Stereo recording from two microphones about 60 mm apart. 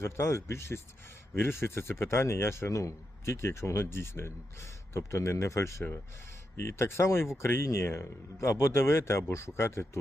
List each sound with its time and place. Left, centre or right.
0.0 s speech: left